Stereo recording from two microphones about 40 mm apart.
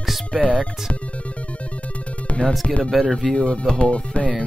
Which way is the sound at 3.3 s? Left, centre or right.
Left.